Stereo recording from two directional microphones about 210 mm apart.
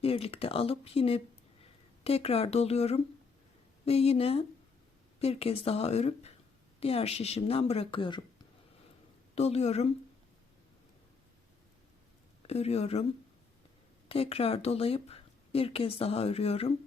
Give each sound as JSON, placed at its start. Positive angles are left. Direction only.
{"t": 0.0, "sound": "speech", "side_deg": 25}
{"t": 9.3, "sound": "speech", "side_deg": 30}
{"t": 12.5, "sound": "speech", "side_deg": 30}
{"t": 14.1, "sound": "speech", "side_deg": 30}